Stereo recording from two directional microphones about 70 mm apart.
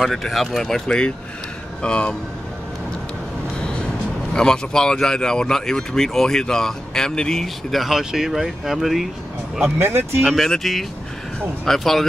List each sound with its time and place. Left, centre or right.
0.0 s speech: centre
4.3 s speech: centre
9.8 s speech: right
10.3 s speech: centre